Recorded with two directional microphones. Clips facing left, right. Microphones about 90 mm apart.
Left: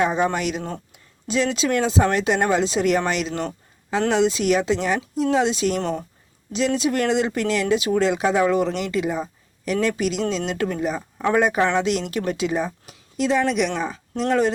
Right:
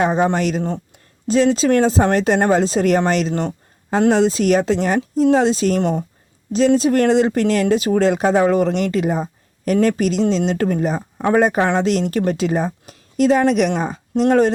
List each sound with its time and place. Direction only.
0.0 s speech: 35° right (ahead or behind)